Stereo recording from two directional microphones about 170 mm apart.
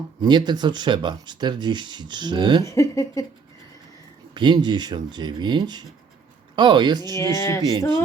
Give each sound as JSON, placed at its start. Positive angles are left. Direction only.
{"t": 0.2, "sound": "speech", "side_deg": -25}
{"t": 2.6, "sound": "speech", "side_deg": 20}
{"t": 4.4, "sound": "speech", "side_deg": -25}
{"t": 7.2, "sound": "speech", "side_deg": 15}